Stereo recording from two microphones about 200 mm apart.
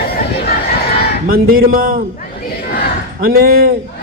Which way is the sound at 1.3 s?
45° right (ahead or behind).